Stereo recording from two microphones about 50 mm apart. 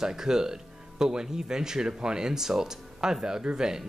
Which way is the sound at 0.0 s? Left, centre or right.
Centre.